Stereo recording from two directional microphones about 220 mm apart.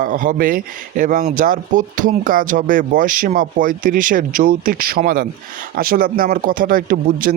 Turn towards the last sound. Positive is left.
turn(degrees=-40)  # may be behind; listen again after turning